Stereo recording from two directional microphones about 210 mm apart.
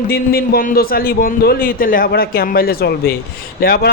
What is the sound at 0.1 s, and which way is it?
A man's voice, 45° left (ahead or behind).